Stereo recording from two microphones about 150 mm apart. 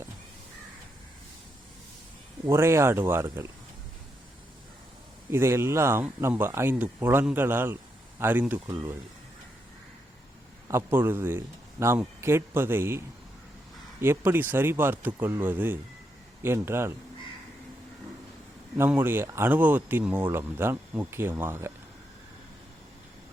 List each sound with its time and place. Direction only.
2.5 s speech: 15° right (ahead or behind)
5.3 s speech: 15° right (ahead or behind)
8.7 s speech: 20° right (ahead or behind)
10.7 s speech: 15° right (ahead or behind)
18.8 s speech: 15° right (ahead or behind)